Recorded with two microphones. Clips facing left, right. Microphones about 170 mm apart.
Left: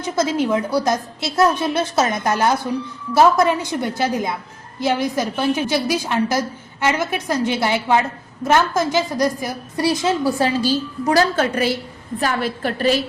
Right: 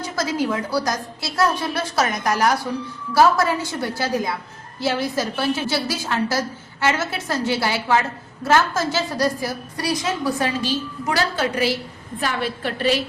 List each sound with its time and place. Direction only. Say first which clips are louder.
0.0 s a woman's voice: left 4 dB; 20° left (ahead or behind); by 13.0 s 40° left (ahead or behind)